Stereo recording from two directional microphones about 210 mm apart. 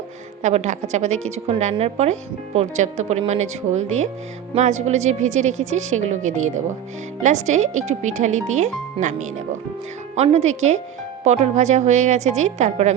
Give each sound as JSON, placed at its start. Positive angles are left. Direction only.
{"t": 0.4, "sound": "speech", "side_deg": -35}